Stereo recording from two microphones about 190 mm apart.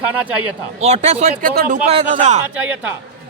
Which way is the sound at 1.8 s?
35° right (ahead or behind).